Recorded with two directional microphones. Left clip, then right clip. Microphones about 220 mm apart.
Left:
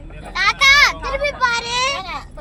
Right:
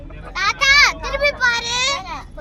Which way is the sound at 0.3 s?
35° left (ahead or behind).